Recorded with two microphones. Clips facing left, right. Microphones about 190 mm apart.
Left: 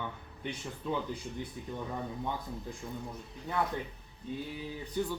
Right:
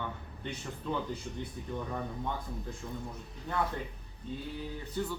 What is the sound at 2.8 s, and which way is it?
Speech, 15° left (ahead or behind).